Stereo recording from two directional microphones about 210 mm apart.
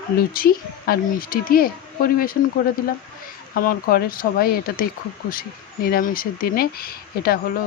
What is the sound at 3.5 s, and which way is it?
Speech, 45° left (ahead or behind).